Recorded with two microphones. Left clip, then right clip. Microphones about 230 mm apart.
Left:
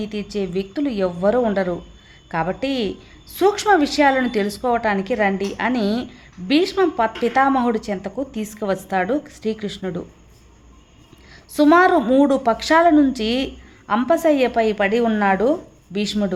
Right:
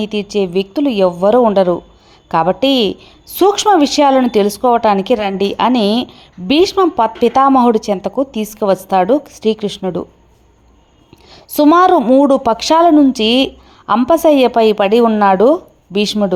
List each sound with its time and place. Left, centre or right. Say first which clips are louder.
0.0 s a woman's voice: right 9 dB; right
11.3 s a woman's voice: right 5 dB; right